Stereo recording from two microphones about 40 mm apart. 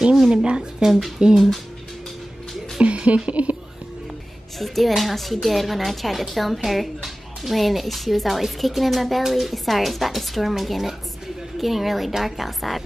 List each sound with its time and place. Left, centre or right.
0.3 s speech: right
1.3 s a woman's voice: centre
2.8 s music: right
3.3 s speech: right
4.6 s a woman's voice: centre